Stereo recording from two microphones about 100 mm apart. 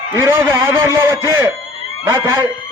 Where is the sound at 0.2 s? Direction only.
25° right (ahead or behind).